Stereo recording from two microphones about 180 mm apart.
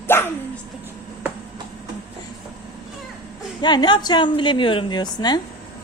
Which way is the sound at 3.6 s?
25° left (ahead or behind).